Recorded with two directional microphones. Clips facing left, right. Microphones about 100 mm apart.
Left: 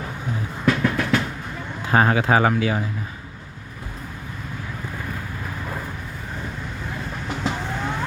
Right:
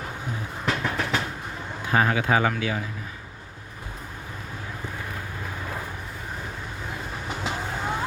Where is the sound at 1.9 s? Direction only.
40° left (ahead or behind).